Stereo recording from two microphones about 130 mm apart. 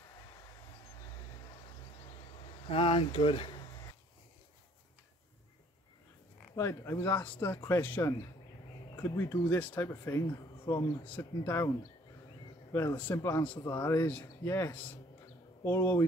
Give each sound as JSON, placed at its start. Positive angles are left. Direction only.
{"t": 2.7, "sound": "speech", "side_deg": 40}
{"t": 6.5, "sound": "speech", "side_deg": 20}
{"t": 12.7, "sound": "speech", "side_deg": 15}